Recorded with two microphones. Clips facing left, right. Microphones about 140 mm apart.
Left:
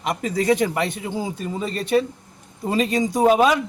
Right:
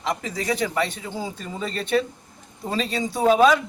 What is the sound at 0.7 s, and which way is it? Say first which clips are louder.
Speech: left 2 dB; 15° left (ahead or behind).